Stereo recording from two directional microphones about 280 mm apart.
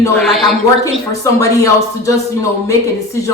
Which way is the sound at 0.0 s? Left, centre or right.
Centre.